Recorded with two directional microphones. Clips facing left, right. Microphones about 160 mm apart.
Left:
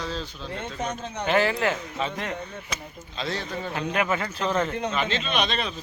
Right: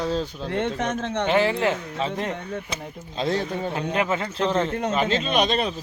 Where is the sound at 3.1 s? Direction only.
50° right (ahead or behind).